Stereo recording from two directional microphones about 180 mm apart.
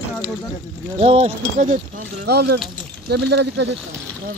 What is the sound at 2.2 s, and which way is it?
Speech, 65° right (ahead or behind).